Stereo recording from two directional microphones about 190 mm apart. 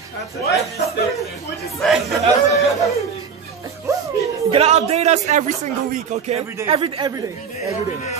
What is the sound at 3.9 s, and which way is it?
Music, 15° right (ahead or behind).